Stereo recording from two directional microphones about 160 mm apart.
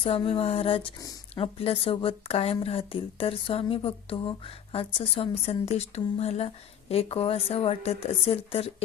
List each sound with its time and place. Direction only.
0.0 s a woman's voice: 35° left (ahead or behind)